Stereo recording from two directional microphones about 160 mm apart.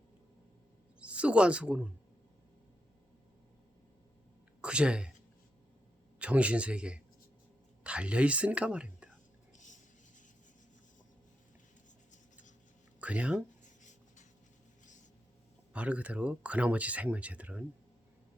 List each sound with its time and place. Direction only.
0.9 s speech: 5° right (ahead or behind)
4.6 s speech: 5° right (ahead or behind)
6.1 s speech: 10° right (ahead or behind)
13.0 s speech: 10° right (ahead or behind)
13.7 s writing: 50° left (ahead or behind)
15.7 s speech: 10° right (ahead or behind)